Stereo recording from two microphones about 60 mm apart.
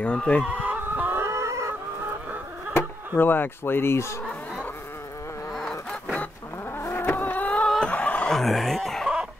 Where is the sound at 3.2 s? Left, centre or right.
Left.